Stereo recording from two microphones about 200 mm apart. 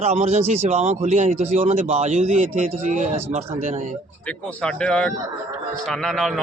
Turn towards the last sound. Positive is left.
turn(degrees=0)  # may be behind; listen again after turning